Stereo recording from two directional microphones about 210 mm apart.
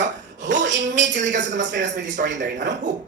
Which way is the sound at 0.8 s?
35° right (ahead or behind).